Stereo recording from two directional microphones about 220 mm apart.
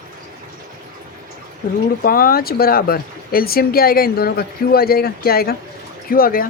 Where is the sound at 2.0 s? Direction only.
40° left (ahead or behind).